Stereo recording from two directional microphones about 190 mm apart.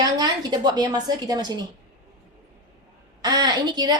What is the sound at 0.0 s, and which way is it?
A woman's voice, 20° right (ahead or behind).